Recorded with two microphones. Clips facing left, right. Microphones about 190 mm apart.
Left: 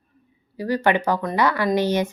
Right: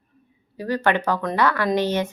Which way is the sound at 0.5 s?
10° left (ahead or behind).